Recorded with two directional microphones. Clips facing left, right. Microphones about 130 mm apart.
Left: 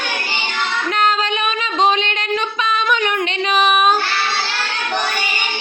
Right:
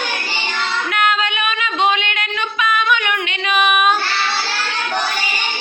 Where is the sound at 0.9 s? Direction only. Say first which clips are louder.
Left 2 dB; 35° left (ahead or behind).